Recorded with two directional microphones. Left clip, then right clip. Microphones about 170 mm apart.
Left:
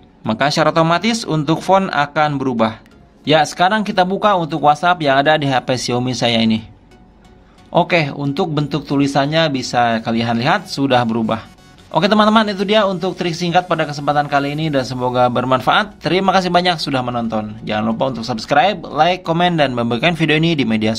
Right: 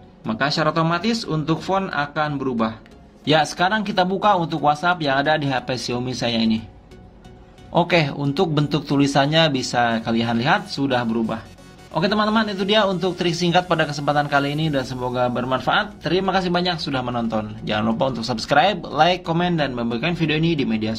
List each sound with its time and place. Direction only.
0.2 s a man's voice: 35° left (ahead or behind)
3.3 s speech: 20° left (ahead or behind)
7.7 s a man's voice: 15° left (ahead or behind)
19.3 s a man's voice: 30° left (ahead or behind)